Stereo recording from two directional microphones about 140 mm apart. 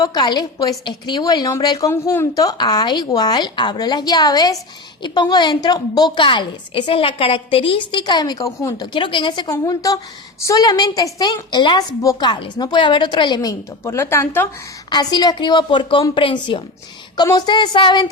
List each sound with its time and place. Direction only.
0.0 s a woman's voice: 30° left (ahead or behind)
14.8 s a woman's voice: 30° left (ahead or behind)